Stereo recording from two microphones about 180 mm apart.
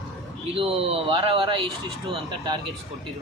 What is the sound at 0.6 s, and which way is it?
Speech, 30° right (ahead or behind).